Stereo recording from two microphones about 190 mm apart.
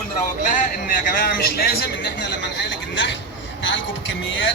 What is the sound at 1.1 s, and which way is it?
A man's voice, 50° left (ahead or behind).